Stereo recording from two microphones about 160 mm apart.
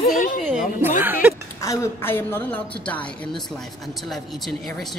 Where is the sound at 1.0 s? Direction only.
10° right (ahead or behind).